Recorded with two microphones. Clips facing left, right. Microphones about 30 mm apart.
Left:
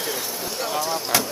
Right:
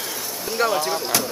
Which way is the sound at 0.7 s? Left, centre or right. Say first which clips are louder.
Even; centre.